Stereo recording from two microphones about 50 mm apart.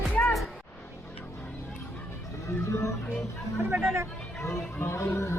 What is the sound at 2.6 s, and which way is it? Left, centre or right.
Speech, left.